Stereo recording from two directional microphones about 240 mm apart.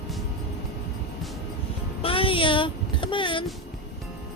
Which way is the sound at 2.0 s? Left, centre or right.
Left.